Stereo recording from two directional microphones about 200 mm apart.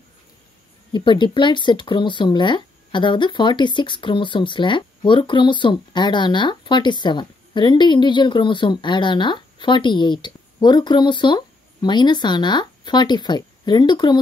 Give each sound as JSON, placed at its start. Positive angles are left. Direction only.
{"t": 0.9, "sound": "speech", "side_deg": 25}